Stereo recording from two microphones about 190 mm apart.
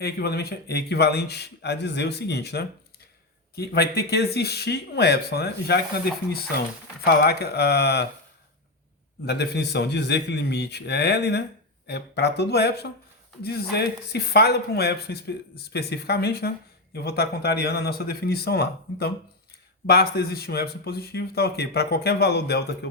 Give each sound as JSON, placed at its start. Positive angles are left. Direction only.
{"t": 0.0, "sound": "speech", "side_deg": 55}
{"t": 7.0, "sound": "speech", "side_deg": 55}
{"t": 9.2, "sound": "speech", "side_deg": 60}